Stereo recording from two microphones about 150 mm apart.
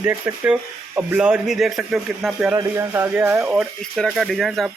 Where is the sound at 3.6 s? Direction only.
Centre (ahead or behind).